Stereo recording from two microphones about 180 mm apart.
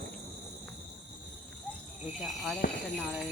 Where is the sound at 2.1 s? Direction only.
Centre (ahead or behind).